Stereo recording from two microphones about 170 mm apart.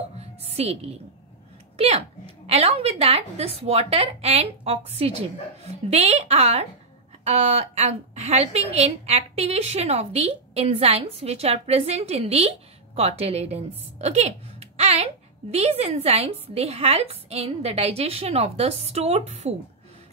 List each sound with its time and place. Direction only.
0.5 s music: 40° right (ahead or behind)
1.8 s a woman's voice: 35° right (ahead or behind)